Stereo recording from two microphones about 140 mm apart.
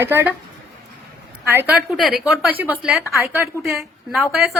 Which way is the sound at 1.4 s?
15° right (ahead or behind).